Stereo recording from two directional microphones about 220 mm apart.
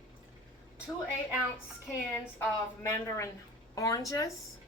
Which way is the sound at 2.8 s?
15° left (ahead or behind).